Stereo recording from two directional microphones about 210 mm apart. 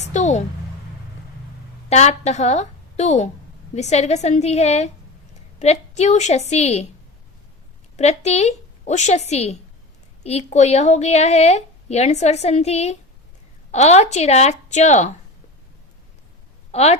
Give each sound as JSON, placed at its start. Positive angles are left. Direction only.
{"t": 0.0, "sound": "a woman's voice", "side_deg": 35}
{"t": 1.9, "sound": "a woman's voice", "side_deg": 30}
{"t": 7.9, "sound": "a woman's voice", "side_deg": 30}
{"t": 16.7, "sound": "a woman's voice", "side_deg": 30}